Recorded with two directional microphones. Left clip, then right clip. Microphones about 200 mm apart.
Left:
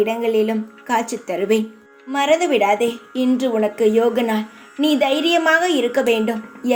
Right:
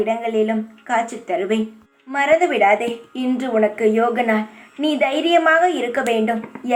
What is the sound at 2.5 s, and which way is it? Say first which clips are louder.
Speech: right 1 dB; 55° left (ahead or behind).